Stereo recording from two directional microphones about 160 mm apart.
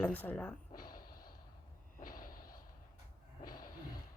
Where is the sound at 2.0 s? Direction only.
60° left (ahead or behind).